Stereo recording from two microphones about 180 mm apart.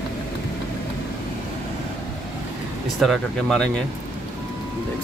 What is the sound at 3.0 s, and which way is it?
Speech, centre (ahead or behind).